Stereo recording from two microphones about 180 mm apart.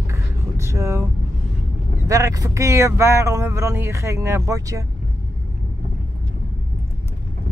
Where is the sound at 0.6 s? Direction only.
15° right (ahead or behind).